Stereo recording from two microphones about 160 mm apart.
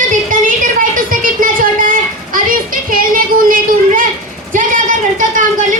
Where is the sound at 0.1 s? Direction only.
55° right (ahead or behind).